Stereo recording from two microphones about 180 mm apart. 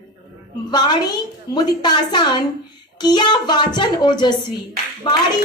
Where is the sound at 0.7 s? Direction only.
25° left (ahead or behind).